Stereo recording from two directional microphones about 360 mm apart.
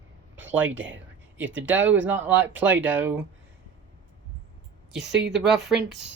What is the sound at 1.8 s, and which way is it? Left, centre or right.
Speech, centre.